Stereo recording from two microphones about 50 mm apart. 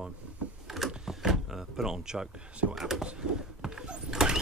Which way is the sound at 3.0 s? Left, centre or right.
Centre.